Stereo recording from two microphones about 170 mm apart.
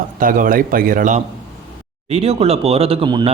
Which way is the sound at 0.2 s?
55° right (ahead or behind).